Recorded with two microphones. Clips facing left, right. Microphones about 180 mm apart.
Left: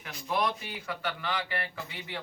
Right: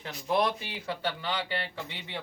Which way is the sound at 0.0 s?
30° right (ahead or behind).